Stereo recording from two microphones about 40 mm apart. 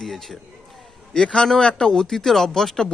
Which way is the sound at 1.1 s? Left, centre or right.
Centre.